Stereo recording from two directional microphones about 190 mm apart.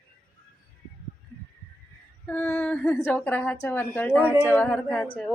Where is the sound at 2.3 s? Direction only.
10° left (ahead or behind).